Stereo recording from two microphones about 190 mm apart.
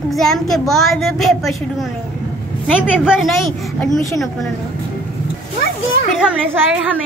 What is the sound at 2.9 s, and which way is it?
Speech, 5° right (ahead or behind).